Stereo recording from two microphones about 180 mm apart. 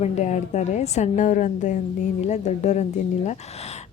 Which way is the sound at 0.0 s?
40° left (ahead or behind).